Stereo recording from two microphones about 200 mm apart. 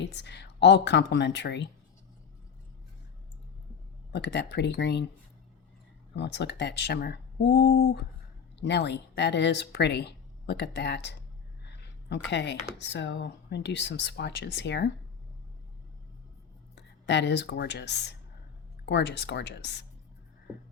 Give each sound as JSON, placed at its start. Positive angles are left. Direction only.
{"t": 0.0, "sound": "speech", "side_deg": 60}
{"t": 4.1, "sound": "speech", "side_deg": 55}
{"t": 6.1, "sound": "speech", "side_deg": 55}
{"t": 11.6, "sound": "a sound", "side_deg": 55}
{"t": 12.8, "sound": "speech", "side_deg": 60}
{"t": 16.7, "sound": "speech", "side_deg": 60}